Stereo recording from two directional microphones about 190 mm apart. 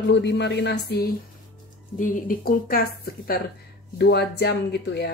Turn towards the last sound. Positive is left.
turn(degrees=60)  # may be behind; listen again after turning